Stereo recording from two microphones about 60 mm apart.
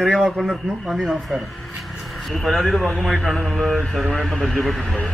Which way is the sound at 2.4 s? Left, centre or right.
Centre.